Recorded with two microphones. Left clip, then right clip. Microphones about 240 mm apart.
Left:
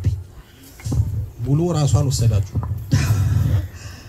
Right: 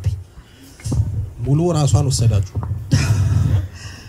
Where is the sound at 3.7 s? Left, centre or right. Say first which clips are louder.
Right 3 dB; right.